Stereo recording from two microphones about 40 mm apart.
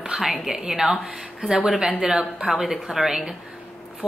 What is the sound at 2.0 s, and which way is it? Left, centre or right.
Speech, centre.